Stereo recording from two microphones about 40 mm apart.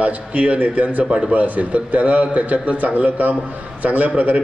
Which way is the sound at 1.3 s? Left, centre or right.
Right.